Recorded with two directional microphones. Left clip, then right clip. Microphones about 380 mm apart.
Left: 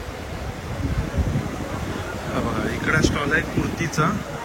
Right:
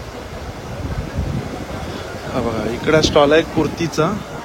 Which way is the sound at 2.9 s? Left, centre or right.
Centre.